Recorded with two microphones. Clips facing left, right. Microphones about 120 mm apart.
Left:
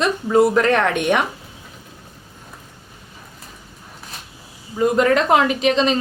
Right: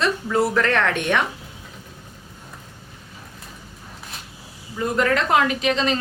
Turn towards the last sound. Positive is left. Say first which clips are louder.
# left 4 dB
turn(degrees=20)  # may be behind; listen again after turning